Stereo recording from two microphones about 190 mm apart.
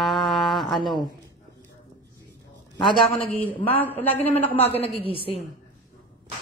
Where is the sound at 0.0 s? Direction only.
Centre (ahead or behind).